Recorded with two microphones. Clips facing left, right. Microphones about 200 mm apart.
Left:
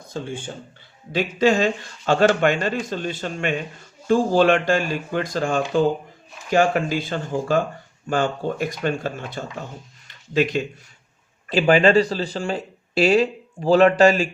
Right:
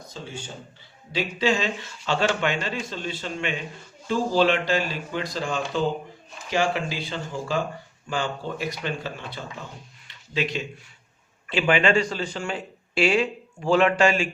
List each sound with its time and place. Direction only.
0.1 s a man's voice: 55° left (ahead or behind)
10.1 s a sound: 45° left (ahead or behind)
11.4 s a man's voice: 40° left (ahead or behind)